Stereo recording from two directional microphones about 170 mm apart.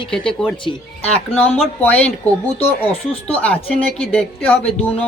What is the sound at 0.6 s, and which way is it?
Speech, 35° left (ahead or behind).